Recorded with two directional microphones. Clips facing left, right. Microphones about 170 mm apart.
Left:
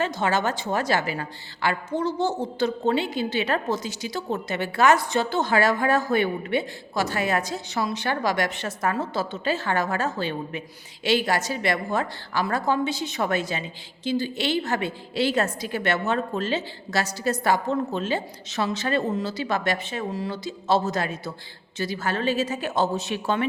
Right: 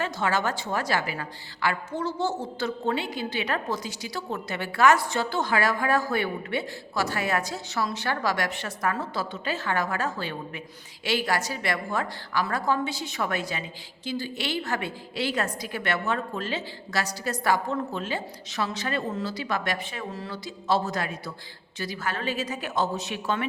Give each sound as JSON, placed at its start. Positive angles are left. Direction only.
{"t": 0.0, "sound": "a woman's voice", "side_deg": 20}
{"t": 20.1, "sound": "speech", "side_deg": 15}
{"t": 20.3, "sound": "a woman's voice", "side_deg": 25}